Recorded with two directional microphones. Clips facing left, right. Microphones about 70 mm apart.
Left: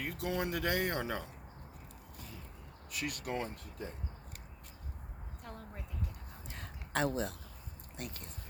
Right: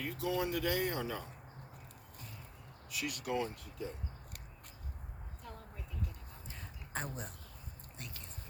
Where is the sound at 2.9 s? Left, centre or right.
Left.